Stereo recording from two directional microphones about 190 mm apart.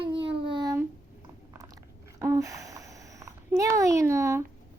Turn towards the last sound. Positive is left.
turn(degrees=-15)  # may be behind; listen again after turning